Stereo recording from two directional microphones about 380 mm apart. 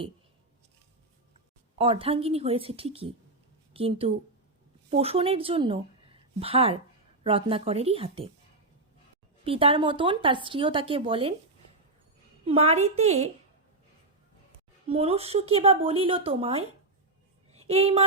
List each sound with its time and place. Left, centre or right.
1.8 s a woman's voice: centre
9.4 s speech: centre
12.5 s speech: centre
14.8 s speech: centre
17.5 s a sound: centre